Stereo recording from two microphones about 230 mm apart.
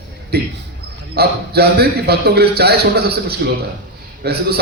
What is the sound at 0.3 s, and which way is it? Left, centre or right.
A man's voice, right.